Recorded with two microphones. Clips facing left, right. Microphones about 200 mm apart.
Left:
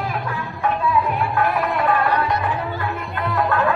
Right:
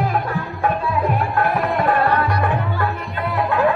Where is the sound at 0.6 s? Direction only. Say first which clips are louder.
Left 1 dB; 50° right (ahead or behind).